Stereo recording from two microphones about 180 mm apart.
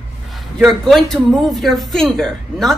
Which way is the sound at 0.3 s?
Centre (ahead or behind).